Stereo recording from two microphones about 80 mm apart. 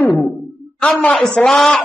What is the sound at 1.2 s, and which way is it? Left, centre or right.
Speech, centre.